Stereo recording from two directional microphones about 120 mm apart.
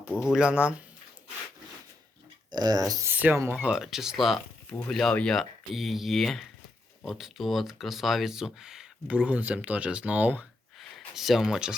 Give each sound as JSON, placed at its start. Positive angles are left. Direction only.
{"t": 0.1, "sound": "speech", "side_deg": 25}
{"t": 0.3, "sound": "speech", "side_deg": -10}
{"t": 2.5, "sound": "speech", "side_deg": -35}
{"t": 3.1, "sound": "speech", "side_deg": -15}
{"t": 10.8, "sound": "speech", "side_deg": 0}